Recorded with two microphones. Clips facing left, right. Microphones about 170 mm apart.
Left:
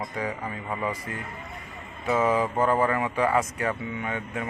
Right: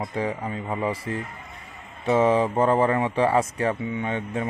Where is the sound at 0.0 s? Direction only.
30° right (ahead or behind).